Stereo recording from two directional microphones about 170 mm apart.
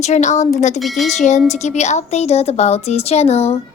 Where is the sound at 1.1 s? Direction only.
45° left (ahead or behind).